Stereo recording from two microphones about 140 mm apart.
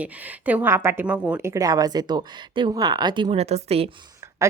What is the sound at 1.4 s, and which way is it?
Speech, 20° right (ahead or behind).